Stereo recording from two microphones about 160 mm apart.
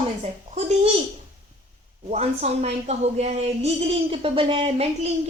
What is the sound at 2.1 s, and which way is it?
Speech, 45° right (ahead or behind).